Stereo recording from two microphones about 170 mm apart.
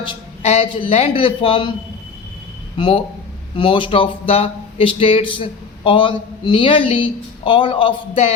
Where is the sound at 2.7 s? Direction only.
30° left (ahead or behind).